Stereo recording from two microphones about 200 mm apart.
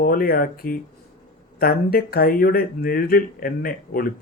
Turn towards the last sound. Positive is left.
turn(degrees=45)  # may be behind; listen again after turning